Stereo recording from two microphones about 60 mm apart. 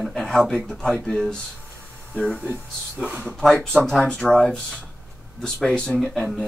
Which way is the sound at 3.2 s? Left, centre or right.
Centre.